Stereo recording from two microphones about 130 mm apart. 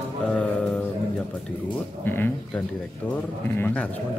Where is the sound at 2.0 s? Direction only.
15° left (ahead or behind).